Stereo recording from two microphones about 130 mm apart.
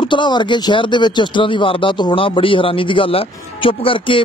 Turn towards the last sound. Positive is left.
turn(degrees=40)  # may be behind; listen again after turning